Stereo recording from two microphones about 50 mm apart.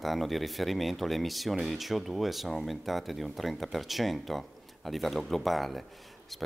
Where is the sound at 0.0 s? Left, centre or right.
Centre.